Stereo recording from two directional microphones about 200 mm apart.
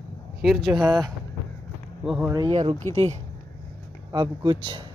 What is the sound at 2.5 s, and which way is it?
Speech, 30° right (ahead or behind).